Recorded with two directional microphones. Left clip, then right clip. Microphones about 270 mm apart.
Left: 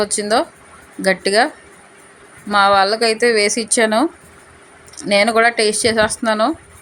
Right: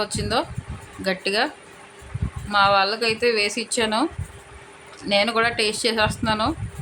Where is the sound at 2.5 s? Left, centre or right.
Centre.